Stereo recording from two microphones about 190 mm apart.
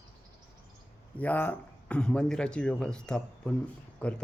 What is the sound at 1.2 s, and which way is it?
Speech, 10° left (ahead or behind).